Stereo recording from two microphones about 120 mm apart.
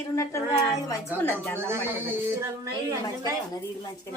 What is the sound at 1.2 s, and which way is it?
Speech, 15° left (ahead or behind).